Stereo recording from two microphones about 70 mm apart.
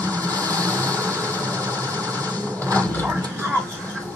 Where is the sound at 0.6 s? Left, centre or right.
Left.